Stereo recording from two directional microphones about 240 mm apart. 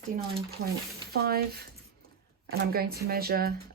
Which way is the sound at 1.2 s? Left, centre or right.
Right.